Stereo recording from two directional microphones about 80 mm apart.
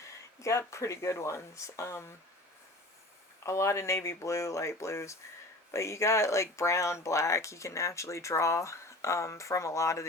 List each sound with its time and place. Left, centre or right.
0.0 s a sound: left
0.7 s speech: left
3.4 s speech: left